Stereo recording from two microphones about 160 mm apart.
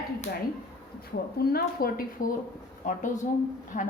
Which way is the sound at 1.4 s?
75° left (ahead or behind).